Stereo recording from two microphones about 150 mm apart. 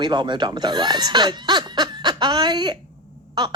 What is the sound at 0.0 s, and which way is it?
Speech, 30° right (ahead or behind).